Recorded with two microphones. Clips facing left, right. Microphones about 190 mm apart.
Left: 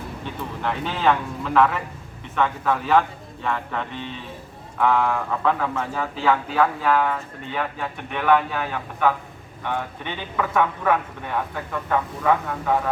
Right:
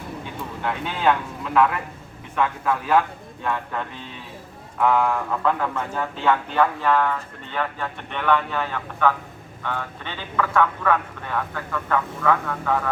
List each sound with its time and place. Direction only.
0.6 s speech: centre (ahead or behind); by 12.8 s 20° left (ahead or behind)